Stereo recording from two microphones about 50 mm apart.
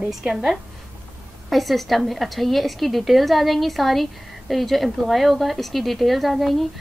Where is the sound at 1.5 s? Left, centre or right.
Centre.